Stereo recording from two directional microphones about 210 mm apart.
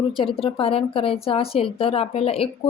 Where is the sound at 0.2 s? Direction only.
25° left (ahead or behind).